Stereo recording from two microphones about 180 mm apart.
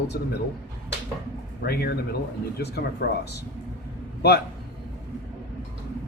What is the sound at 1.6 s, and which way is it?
Speech, 60° left (ahead or behind).